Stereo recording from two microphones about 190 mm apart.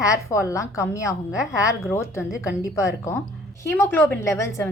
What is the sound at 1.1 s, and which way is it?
Speech, 5° right (ahead or behind).